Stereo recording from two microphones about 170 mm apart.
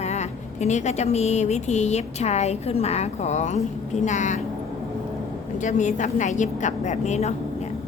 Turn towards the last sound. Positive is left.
turn(degrees=40)  # may be behind; listen again after turning